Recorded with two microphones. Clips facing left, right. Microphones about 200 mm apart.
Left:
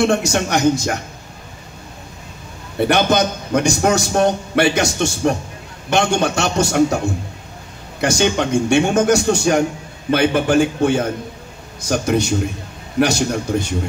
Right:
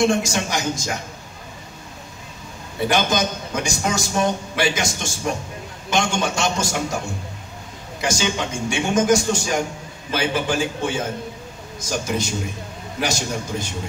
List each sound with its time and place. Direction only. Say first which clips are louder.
0.0 s a man's voice: left 3 dB; 60° left (ahead or behind)
2.8 s a man's voice: left 5 dB; 60° left (ahead or behind)
8.0 s a man's voice: left 6 dB; 65° left (ahead or behind)